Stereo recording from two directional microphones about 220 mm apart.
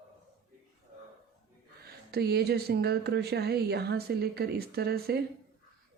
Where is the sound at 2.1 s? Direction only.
45° right (ahead or behind).